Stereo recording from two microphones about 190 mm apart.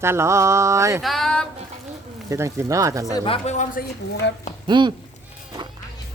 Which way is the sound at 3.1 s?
30° left (ahead or behind).